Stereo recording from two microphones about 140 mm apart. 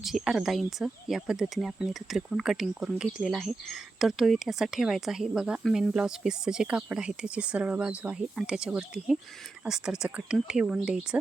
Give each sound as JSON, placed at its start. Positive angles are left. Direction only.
{"t": 0.0, "sound": "speech", "side_deg": 0}